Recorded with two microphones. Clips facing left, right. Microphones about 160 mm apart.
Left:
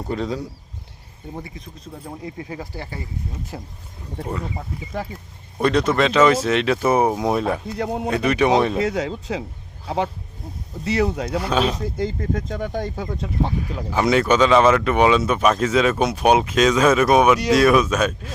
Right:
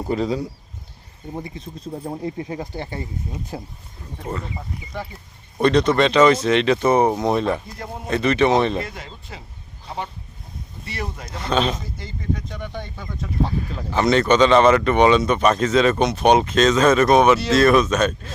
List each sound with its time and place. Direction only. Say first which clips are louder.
0.0 s speech: right 3 dB; 5° right (ahead or behind)
1.5 s speech: right 6 dB; 30° right (ahead or behind)
5.6 s speech: right 2 dB; 5° left (ahead or behind)
7.8 s a man's voice: left 8 dB; 80° left
8.1 s speech: right 1 dB; 10° left (ahead or behind)
8.9 s speech: left 13 dB; 85° left
10.8 s speech: left 11 dB; 85° left
11.3 s speech: even; 10° left (ahead or behind)
12.3 s speech: left 3 dB; 45° left (ahead or behind)
13.6 s speech: even; 10° left (ahead or behind)